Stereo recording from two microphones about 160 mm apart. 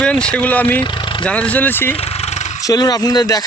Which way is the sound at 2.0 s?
40° left (ahead or behind).